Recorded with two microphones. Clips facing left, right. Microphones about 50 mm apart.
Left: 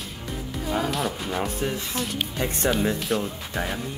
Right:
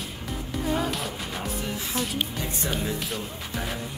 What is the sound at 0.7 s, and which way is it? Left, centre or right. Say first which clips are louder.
Speech: left 3 dB; centre.